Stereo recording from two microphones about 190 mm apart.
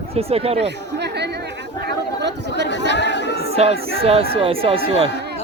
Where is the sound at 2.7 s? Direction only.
65° left (ahead or behind).